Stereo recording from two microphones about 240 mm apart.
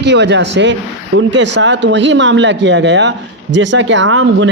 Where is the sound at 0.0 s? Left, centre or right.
Right.